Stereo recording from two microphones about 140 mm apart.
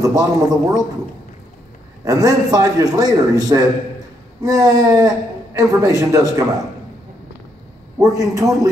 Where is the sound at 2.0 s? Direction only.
25° right (ahead or behind).